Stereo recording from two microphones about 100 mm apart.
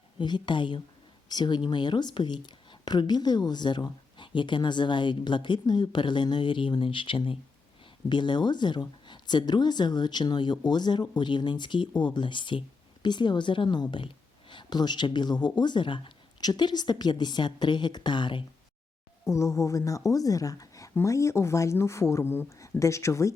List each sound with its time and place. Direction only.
0.2 s speech: 50° left (ahead or behind)
19.3 s speech: 30° left (ahead or behind)